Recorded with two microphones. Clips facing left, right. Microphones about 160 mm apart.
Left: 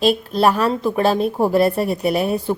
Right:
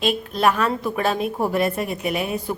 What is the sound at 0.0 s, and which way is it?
A woman's voice, 35° left (ahead or behind).